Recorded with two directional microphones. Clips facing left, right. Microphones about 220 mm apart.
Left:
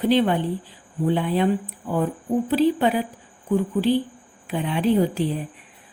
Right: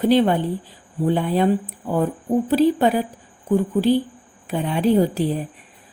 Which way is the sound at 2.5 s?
45° right (ahead or behind).